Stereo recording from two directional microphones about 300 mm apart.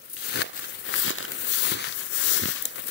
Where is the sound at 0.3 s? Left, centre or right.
Left.